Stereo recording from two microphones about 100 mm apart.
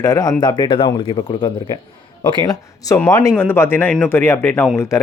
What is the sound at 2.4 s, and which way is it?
Speech, 40° left (ahead or behind).